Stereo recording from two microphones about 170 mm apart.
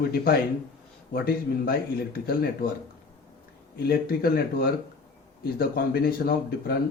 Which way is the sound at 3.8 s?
65° left (ahead or behind).